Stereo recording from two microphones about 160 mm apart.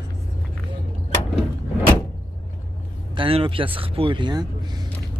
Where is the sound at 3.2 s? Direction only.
35° right (ahead or behind).